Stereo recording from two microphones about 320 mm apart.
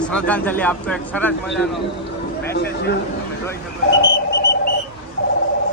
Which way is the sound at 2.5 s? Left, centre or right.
Left.